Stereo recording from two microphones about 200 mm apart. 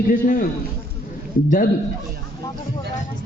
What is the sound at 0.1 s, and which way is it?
Speech, 40° left (ahead or behind).